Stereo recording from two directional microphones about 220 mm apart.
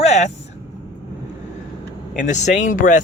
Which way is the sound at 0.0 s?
30° left (ahead or behind).